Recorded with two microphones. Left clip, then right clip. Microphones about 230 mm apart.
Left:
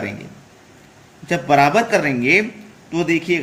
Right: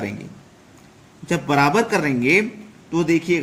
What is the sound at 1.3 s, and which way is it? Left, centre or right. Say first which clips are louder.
Speech: left 4 dB; centre.